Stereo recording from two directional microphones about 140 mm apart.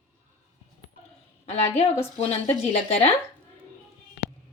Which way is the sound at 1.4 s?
50° left (ahead or behind).